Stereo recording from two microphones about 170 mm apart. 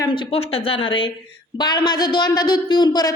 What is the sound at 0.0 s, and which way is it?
A woman's voice, 30° left (ahead or behind).